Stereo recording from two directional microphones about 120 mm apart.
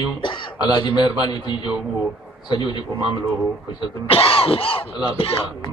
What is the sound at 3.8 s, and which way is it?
Speech, 50° left (ahead or behind).